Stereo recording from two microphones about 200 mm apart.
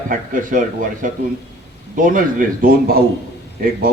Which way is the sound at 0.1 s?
40° right (ahead or behind).